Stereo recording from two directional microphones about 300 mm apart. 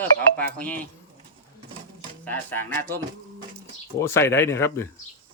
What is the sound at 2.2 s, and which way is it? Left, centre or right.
Speech, centre.